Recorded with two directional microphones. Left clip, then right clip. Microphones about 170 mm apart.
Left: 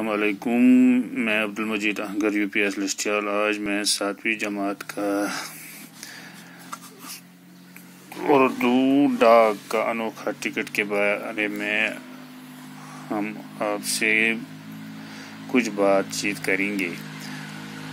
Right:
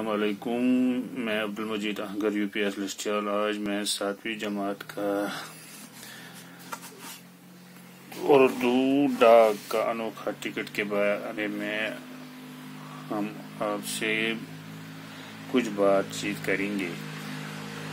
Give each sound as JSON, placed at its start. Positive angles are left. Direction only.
{"t": 0.0, "sound": "speech", "side_deg": 20}
{"t": 8.2, "sound": "speech", "side_deg": 10}
{"t": 13.1, "sound": "speech", "side_deg": 20}
{"t": 15.5, "sound": "speech", "side_deg": 20}